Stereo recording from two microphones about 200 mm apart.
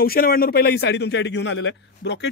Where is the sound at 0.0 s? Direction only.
50° left (ahead or behind).